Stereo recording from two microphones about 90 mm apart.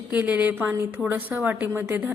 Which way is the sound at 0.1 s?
15° right (ahead or behind).